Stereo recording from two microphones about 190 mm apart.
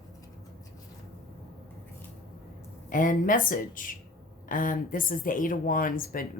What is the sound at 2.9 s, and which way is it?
Speech, 45° left (ahead or behind).